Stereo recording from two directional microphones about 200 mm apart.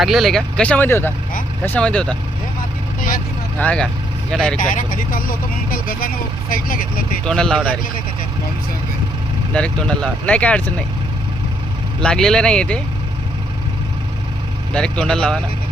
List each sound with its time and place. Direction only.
0.0 s speech: centre (ahead or behind)
3.6 s speech: 5° left (ahead or behind)
4.6 s speech: 40° left (ahead or behind)
7.3 s speech: 5° left (ahead or behind)
9.5 s speech: 5° left (ahead or behind)
11.9 s speech: 5° left (ahead or behind)
14.7 s speech: 5° left (ahead or behind)